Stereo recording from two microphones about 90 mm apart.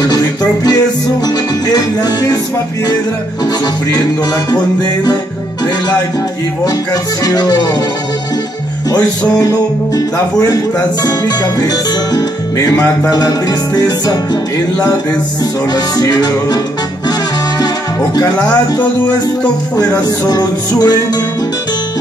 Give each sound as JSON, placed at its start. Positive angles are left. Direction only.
{"t": 0.0, "sound": "music", "side_deg": 45}
{"t": 6.6, "sound": "music", "side_deg": 45}
{"t": 9.4, "sound": "music", "side_deg": 40}
{"t": 15.7, "sound": "music", "side_deg": 45}
{"t": 18.5, "sound": "music", "side_deg": 45}